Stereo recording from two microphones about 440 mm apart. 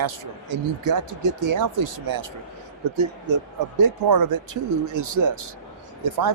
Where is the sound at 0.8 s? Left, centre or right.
Right.